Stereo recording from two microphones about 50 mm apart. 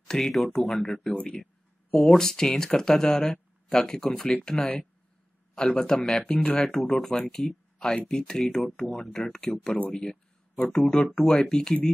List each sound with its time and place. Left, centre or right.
0.1 s speech: centre
1.1 s speech: centre
1.4 s speech: centre
6.3 s speech: centre